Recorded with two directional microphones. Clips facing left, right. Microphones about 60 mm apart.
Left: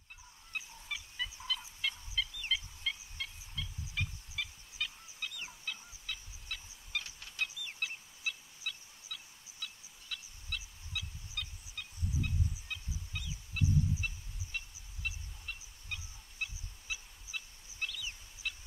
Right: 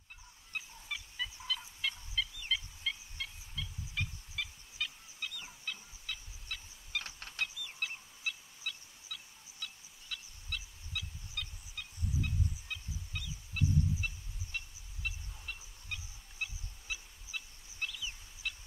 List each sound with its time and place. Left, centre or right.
0.5 s fowl: centre
7.0 s a sound: right
7.8 s fowl: centre
15.0 s goose: centre
18.4 s fowl: centre